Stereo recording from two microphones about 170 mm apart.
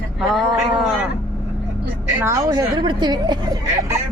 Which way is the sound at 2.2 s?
20° right (ahead or behind).